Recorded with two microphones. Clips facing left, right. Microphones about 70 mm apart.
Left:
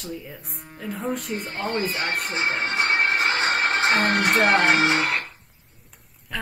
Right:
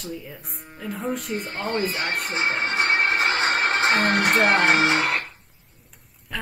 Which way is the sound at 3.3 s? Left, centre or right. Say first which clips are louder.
Even; right.